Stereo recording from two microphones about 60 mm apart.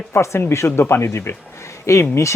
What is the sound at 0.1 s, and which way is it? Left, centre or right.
Speech, left.